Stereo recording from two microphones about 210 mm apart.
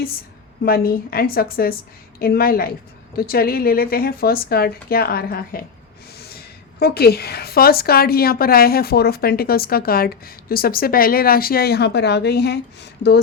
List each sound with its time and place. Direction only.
0.6 s a woman's voice: 45° left (ahead or behind)
6.7 s a woman's voice: 50° left (ahead or behind)